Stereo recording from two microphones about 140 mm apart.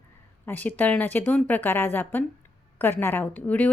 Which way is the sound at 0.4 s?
10° left (ahead or behind).